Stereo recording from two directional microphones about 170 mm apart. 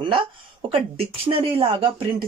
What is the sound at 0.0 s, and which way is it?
Speech, 30° right (ahead or behind).